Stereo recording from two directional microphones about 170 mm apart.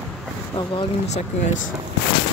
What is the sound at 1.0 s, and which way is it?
Speech, 40° left (ahead or behind).